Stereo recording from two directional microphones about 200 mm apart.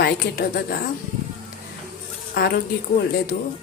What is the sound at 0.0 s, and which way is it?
Speech, 50° left (ahead or behind).